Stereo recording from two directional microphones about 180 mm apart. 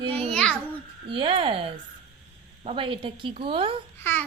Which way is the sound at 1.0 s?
30° right (ahead or behind).